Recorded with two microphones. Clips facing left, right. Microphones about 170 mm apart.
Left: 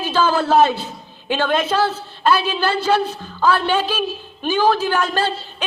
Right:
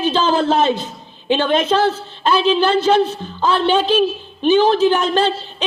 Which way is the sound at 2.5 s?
20° right (ahead or behind).